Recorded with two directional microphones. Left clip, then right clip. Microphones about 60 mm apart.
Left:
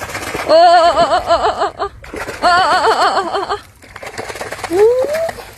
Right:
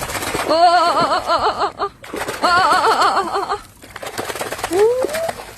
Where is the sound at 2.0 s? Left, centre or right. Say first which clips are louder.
Left 4 dB; centre.